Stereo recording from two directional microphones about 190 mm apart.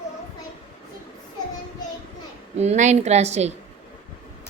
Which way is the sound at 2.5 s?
35° right (ahead or behind).